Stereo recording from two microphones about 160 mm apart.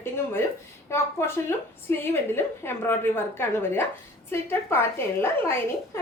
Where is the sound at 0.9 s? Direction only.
15° left (ahead or behind).